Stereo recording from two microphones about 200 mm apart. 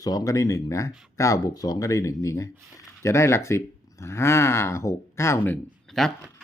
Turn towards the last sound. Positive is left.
turn(degrees=0)  # may be behind; listen again after turning